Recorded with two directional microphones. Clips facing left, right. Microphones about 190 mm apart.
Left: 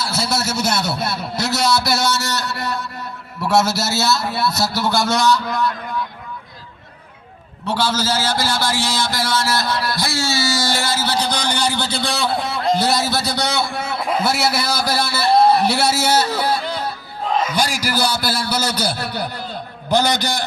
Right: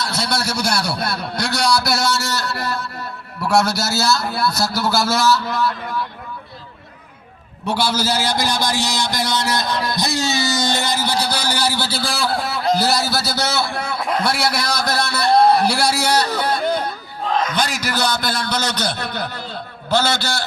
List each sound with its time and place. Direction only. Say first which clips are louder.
0.0 s a man's voice: left 1 dB; 5° left (ahead or behind)
7.7 s a man's voice: even; 10° right (ahead or behind); by 20.4 s 15° left (ahead or behind)